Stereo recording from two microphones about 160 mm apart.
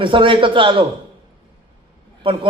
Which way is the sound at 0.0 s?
30° right (ahead or behind).